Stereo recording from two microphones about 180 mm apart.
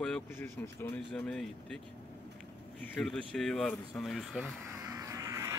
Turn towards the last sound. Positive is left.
turn(degrees=-15)  # may be behind; listen again after turning